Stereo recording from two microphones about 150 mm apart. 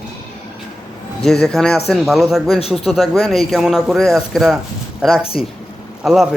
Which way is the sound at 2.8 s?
Centre (ahead or behind).